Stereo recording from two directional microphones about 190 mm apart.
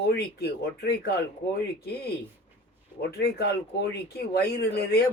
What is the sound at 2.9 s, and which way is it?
Speech, 60° left (ahead or behind).